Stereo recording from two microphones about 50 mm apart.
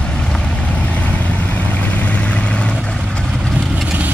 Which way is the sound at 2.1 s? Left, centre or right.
Left.